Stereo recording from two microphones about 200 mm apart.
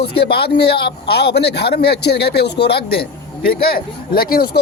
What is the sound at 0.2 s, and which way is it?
A man's voice, 55° left (ahead or behind).